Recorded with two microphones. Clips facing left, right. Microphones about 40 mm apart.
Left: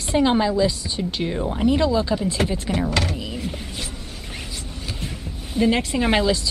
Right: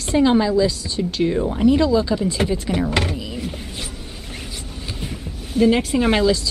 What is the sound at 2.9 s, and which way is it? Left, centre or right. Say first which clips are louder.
Speech: right 2 dB; right.